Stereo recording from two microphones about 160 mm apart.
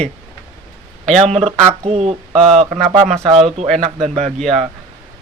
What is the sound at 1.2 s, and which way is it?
Speech, 40° right (ahead or behind).